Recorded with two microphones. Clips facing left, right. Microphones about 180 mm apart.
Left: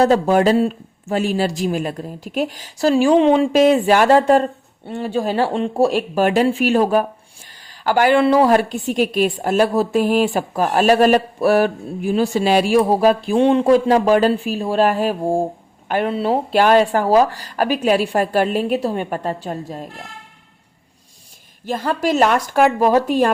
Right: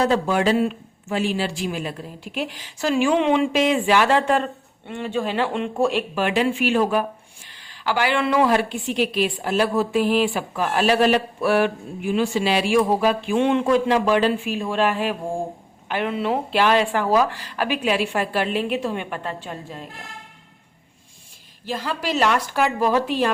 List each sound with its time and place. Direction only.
0.0 s a woman's voice: 40° left (ahead or behind)
21.7 s a woman's voice: 50° left (ahead or behind)